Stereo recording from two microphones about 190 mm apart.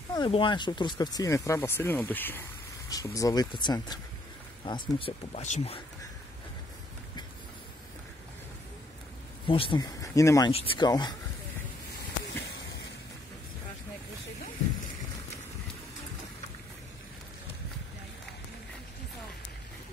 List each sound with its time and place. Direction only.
0.1 s speech: 25° left (ahead or behind)
9.5 s speech: 25° left (ahead or behind)
10.5 s speech: 30° left (ahead or behind)